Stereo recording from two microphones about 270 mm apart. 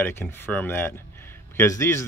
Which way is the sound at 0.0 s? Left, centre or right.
Centre.